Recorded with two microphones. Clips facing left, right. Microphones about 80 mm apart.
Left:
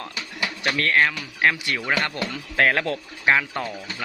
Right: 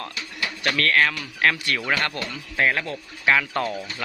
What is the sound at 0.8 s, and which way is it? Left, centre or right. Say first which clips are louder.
A man's voice: even; left.